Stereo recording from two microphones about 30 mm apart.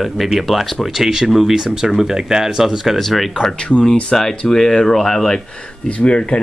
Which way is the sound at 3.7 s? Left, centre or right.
Left.